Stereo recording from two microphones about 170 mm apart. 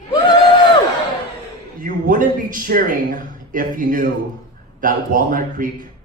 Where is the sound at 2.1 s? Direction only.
50° right (ahead or behind).